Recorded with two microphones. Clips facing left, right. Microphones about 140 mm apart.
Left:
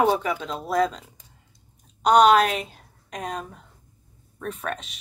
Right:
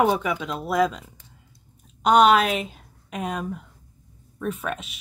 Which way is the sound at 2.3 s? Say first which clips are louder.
Left 1 dB; centre (ahead or behind).